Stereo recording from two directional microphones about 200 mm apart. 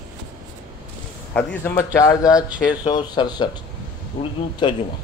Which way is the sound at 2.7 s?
20° left (ahead or behind).